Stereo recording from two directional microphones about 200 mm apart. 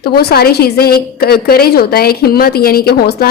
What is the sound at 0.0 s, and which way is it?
A woman's voice, 55° left (ahead or behind).